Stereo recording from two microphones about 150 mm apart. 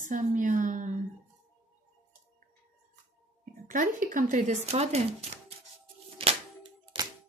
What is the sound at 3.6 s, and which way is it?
Speech, 60° right (ahead or behind).